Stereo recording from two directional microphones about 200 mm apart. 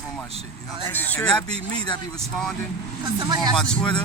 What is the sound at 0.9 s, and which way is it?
Speech, 10° left (ahead or behind).